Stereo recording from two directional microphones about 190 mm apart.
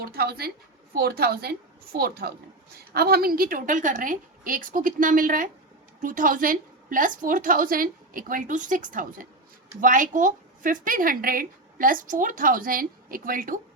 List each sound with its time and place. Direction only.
0.0 s a woman's voice: 55° right (ahead or behind)